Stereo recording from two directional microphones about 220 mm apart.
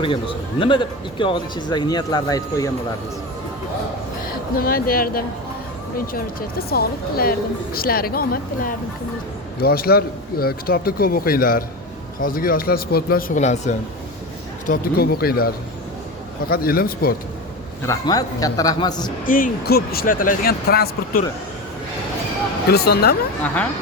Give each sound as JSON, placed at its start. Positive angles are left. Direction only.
{"t": 0.6, "sound": "speech", "side_deg": 20}
{"t": 4.5, "sound": "speech", "side_deg": 40}
{"t": 14.7, "sound": "speech", "side_deg": 45}
{"t": 17.8, "sound": "a man's voice", "side_deg": 15}
{"t": 19.2, "sound": "speech", "side_deg": 40}
{"t": 22.7, "sound": "speech", "side_deg": 45}